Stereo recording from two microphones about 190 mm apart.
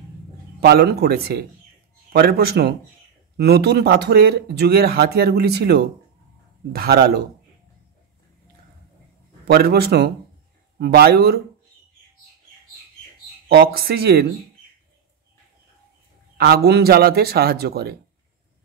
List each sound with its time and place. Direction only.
0.6 s speech: 60° right (ahead or behind)
9.5 s speech: 55° right (ahead or behind)
13.5 s speech: 55° right (ahead or behind)
16.3 s speech: 55° right (ahead or behind)